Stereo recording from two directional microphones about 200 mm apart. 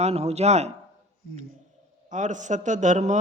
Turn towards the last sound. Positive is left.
turn(degrees=-35)  # may be behind; listen again after turning